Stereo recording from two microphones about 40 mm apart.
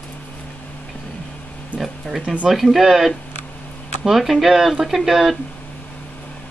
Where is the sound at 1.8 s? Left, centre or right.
Centre.